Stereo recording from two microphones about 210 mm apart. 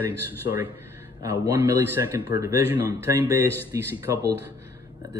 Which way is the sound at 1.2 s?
10° right (ahead or behind).